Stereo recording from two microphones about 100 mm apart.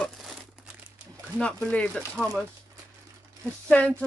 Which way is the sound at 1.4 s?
10° left (ahead or behind).